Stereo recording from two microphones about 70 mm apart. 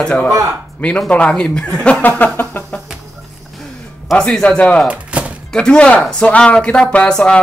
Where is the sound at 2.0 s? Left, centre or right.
Left.